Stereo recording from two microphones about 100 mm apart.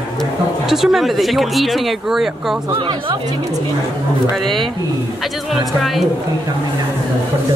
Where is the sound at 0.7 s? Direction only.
Centre (ahead or behind).